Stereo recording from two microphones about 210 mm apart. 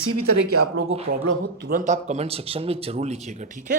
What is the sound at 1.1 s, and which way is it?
Speech, 45° right (ahead or behind).